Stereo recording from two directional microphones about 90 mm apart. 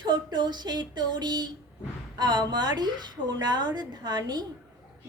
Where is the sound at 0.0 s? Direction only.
55° right (ahead or behind).